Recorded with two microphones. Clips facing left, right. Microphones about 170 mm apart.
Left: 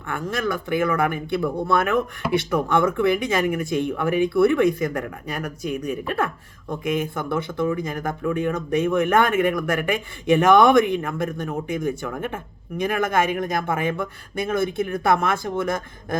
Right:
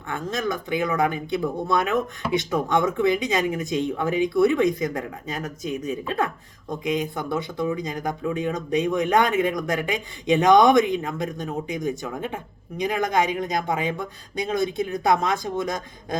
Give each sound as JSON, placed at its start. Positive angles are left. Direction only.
{"t": 0.1, "sound": "speech", "side_deg": -20}
{"t": 13.3, "sound": "speech", "side_deg": 50}
{"t": 13.7, "sound": "speech", "side_deg": -15}